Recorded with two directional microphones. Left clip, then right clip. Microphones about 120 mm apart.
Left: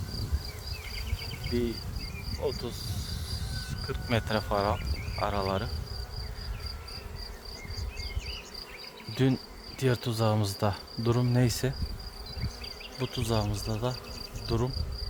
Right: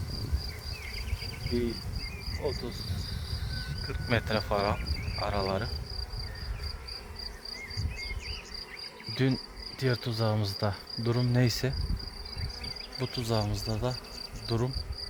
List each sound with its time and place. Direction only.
2.4 s insect: 30° left (ahead or behind)
4.1 s speech: centre (ahead or behind)
9.1 s cricket: 15° left (ahead or behind)
11.2 s cricket: 10° left (ahead or behind)
13.0 s speech: centre (ahead or behind)
14.4 s insect: centre (ahead or behind)